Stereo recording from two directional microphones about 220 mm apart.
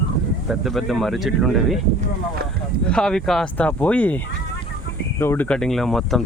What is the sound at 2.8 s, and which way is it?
Speech, 5° left (ahead or behind).